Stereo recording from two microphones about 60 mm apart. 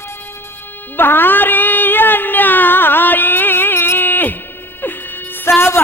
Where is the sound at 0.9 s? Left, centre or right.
Left.